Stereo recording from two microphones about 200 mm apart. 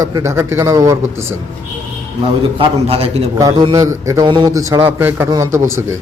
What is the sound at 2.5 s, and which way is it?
A man's voice, 30° right (ahead or behind).